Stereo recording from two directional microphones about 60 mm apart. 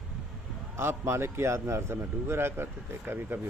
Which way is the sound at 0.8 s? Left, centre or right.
Right.